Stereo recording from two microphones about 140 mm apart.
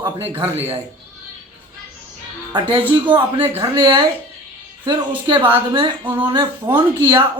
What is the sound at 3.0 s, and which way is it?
Speech, 35° right (ahead or behind).